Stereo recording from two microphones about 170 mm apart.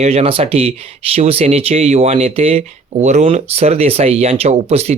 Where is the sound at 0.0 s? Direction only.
35° right (ahead or behind).